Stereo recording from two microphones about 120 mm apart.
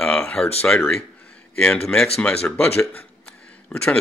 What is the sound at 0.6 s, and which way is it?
Speech, 15° left (ahead or behind).